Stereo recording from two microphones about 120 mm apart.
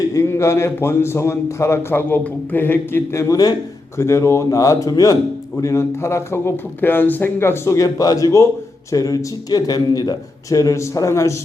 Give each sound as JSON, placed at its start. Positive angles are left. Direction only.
{"t": 0.1, "sound": "a man's voice", "side_deg": 25}